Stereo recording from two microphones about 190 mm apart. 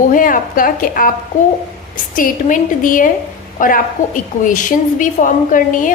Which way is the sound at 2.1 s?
45° left (ahead or behind).